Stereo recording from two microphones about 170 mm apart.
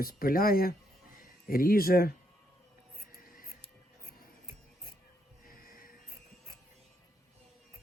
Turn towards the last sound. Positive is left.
turn(degrees=55)  # may be behind; listen again after turning